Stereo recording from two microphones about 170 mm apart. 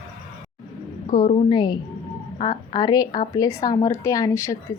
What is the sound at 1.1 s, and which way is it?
A woman's voice, 25° left (ahead or behind).